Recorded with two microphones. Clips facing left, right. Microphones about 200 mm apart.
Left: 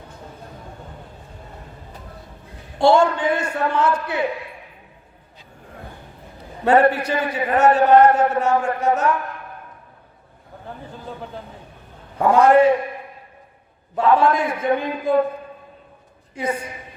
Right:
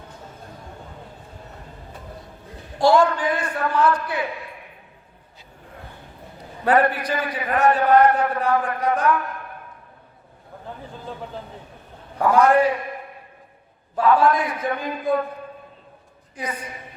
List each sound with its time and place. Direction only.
2.7 s a man's voice: 25° left (ahead or behind)
6.7 s a man's voice: 25° left (ahead or behind)
12.2 s a man's voice: 25° left (ahead or behind)
13.9 s a man's voice: 25° left (ahead or behind)
16.3 s a woman's voice: 25° left (ahead or behind)